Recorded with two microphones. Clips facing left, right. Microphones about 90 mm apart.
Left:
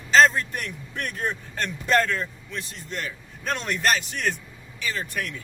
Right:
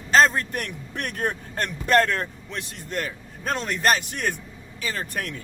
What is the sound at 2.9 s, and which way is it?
A man's voice, 45° right (ahead or behind).